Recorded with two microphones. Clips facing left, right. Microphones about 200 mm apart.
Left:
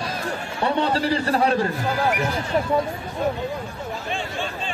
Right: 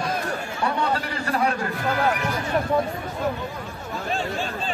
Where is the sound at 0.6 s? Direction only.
30° left (ahead or behind).